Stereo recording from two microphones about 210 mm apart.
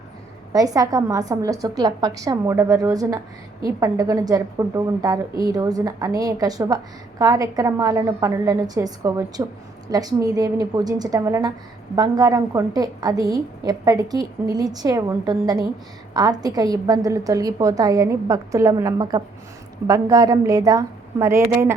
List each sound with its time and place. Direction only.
0.5 s a woman's voice: 15° right (ahead or behind)